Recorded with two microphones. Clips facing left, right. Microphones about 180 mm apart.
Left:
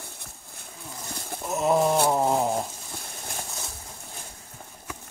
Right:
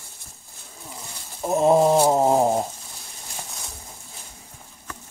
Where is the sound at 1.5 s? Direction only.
30° right (ahead or behind).